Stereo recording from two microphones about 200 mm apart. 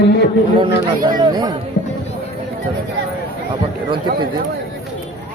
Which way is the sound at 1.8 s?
40° left (ahead or behind).